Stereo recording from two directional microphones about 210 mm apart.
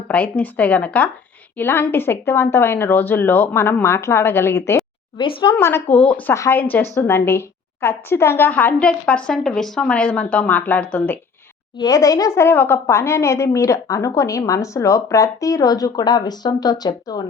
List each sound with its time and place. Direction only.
0.1 s a woman's voice: 5° left (ahead or behind)
5.1 s a woman's voice: 25° left (ahead or behind)